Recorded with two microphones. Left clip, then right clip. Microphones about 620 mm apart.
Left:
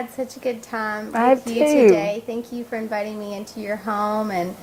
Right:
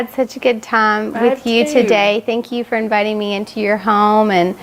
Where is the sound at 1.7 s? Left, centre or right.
Right.